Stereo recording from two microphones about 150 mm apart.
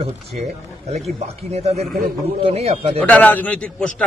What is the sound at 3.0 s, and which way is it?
Speech, 10° left (ahead or behind).